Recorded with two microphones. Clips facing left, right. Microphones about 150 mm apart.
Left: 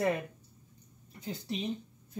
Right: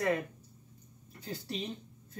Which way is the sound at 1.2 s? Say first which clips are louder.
Left 3 dB; 15° left (ahead or behind).